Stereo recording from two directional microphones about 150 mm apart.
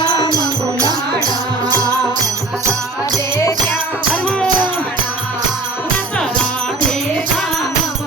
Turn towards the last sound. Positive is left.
turn(degrees=5)  # may be behind; listen again after turning